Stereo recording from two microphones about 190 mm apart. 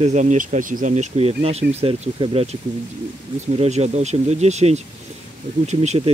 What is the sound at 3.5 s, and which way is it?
Speech, 35° right (ahead or behind).